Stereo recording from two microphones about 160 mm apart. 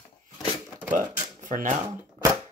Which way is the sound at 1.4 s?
55° right (ahead or behind).